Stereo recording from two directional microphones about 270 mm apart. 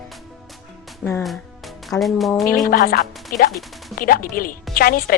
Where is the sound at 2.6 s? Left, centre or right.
Left.